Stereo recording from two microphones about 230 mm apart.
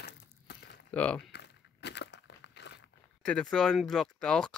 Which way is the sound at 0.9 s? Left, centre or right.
Centre.